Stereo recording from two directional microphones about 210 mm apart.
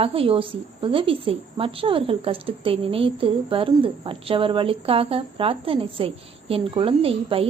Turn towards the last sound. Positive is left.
turn(degrees=-25)  # may be behind; listen again after turning